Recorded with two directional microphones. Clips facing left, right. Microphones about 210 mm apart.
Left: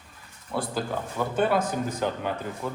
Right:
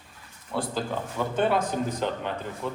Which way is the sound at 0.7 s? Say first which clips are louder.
Even; 5° left (ahead or behind).